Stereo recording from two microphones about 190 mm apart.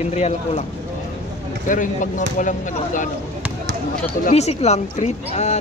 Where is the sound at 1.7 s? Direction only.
45° left (ahead or behind).